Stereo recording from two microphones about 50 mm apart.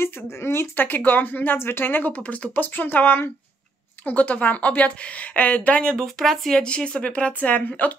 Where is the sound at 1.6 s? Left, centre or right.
Left.